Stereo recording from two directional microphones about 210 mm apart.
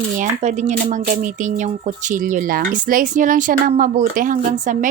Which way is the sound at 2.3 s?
40° right (ahead or behind).